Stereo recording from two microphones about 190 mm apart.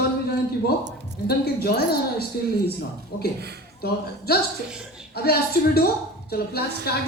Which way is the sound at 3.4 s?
60° right (ahead or behind).